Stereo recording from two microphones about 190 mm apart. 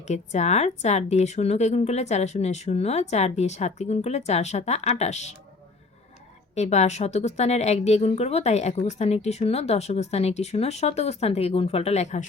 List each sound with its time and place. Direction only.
0.1 s a woman's voice: 35° left (ahead or behind)
6.6 s a woman's voice: 35° left (ahead or behind)